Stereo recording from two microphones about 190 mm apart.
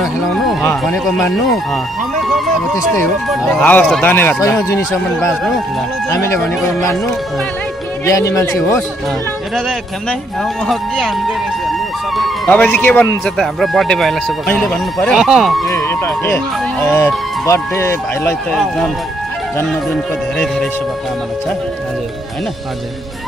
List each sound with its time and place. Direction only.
0.0 s speech: centre (ahead or behind)
3.3 s speech: 5° left (ahead or behind)
8.0 s speech: 15° left (ahead or behind)
10.7 s speech: centre (ahead or behind)
12.4 s speech: 10° left (ahead or behind)
15.7 s speech: 15° left (ahead or behind)